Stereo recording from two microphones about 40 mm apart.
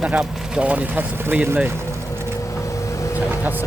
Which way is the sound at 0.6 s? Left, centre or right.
Right.